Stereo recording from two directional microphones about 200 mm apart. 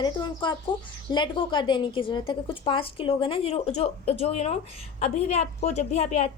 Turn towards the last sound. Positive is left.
turn(degrees=35)  # may be behind; listen again after turning